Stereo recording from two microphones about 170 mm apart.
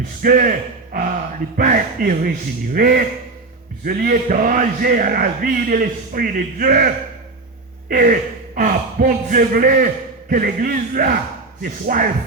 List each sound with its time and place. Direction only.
0.2 s speech: 55° right (ahead or behind)